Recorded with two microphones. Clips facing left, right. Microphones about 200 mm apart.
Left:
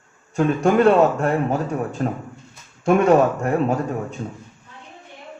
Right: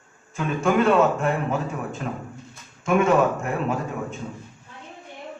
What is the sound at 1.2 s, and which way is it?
Speech, 40° left (ahead or behind).